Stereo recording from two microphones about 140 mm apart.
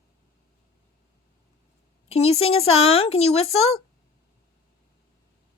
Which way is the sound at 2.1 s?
50° left (ahead or behind).